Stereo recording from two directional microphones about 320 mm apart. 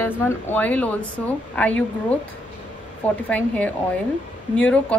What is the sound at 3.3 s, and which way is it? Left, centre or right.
A woman's voice, centre.